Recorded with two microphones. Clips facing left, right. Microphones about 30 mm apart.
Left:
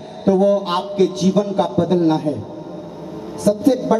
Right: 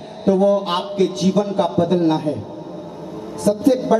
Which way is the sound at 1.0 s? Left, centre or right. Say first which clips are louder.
Left 2 dB; centre.